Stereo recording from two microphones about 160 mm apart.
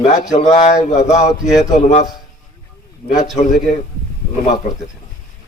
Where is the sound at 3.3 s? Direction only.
50° left (ahead or behind).